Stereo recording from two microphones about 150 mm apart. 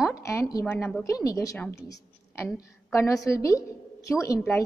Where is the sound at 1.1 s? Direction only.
20° left (ahead or behind).